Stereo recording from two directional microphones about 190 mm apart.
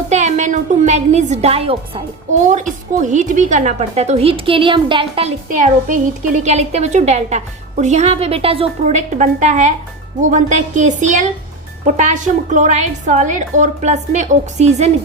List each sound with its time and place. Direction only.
0.1 s a woman's voice: 40° right (ahead or behind)
5.5 s a woman's voice: 40° right (ahead or behind)